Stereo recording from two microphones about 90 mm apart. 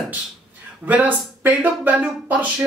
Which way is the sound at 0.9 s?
20° right (ahead or behind).